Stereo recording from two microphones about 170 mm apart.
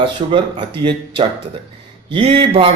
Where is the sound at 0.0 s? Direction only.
30° right (ahead or behind).